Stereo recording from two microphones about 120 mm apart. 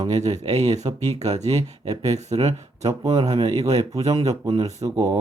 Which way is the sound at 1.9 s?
30° right (ahead or behind).